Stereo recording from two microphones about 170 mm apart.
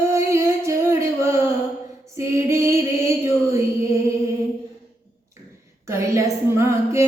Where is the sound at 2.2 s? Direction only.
15° right (ahead or behind).